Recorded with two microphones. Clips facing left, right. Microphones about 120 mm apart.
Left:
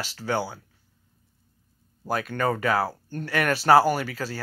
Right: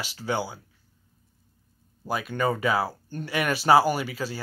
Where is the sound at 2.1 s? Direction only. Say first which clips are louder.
Left 1 dB; 15° right (ahead or behind).